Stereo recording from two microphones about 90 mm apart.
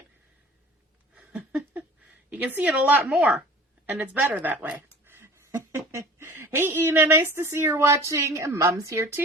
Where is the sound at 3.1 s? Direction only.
5° right (ahead or behind).